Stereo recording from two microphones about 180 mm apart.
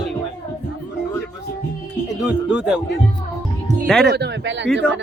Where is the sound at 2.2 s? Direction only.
5° right (ahead or behind).